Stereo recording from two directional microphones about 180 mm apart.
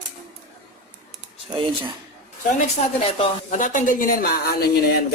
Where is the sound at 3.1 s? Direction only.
40° left (ahead or behind).